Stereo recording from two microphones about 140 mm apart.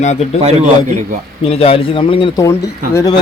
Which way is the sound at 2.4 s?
20° left (ahead or behind).